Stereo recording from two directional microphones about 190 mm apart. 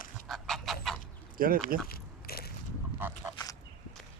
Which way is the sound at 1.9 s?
55° left (ahead or behind).